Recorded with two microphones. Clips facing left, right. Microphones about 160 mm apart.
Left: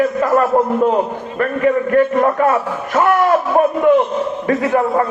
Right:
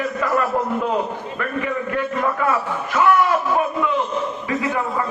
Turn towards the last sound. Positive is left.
turn(degrees=55)  # may be behind; listen again after turning